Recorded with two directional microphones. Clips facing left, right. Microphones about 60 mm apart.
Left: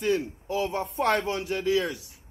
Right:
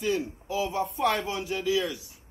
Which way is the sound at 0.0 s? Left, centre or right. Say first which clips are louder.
Left 2 dB; left.